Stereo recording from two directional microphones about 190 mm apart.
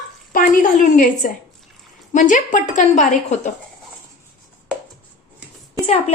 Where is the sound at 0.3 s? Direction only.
45° left (ahead or behind).